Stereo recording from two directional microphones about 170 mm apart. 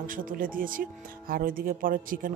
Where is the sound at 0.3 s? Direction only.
55° right (ahead or behind).